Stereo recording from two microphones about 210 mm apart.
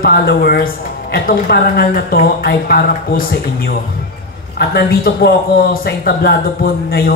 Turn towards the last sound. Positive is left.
turn(degrees=45)  # may be behind; listen again after turning